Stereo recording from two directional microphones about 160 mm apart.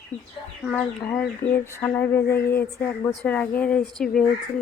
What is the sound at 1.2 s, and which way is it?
Speech, 15° left (ahead or behind).